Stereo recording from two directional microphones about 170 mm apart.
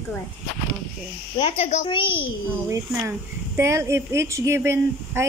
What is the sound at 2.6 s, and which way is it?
A woman's voice, 15° right (ahead or behind).